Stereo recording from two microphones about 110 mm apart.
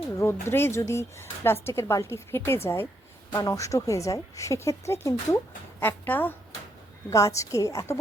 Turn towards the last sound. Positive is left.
turn(degrees=30)  # may be behind; listen again after turning